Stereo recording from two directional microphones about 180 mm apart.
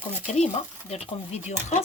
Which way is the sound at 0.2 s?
40° left (ahead or behind).